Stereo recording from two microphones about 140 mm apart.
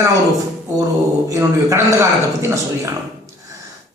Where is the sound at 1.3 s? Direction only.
20° right (ahead or behind).